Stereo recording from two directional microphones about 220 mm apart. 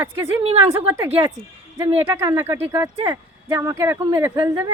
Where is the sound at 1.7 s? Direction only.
15° right (ahead or behind).